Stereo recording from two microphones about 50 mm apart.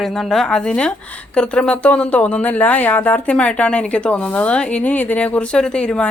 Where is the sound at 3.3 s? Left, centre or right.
Left.